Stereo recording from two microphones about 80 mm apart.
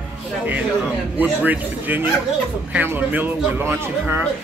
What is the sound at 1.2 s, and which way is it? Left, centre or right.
A woman's voice, right.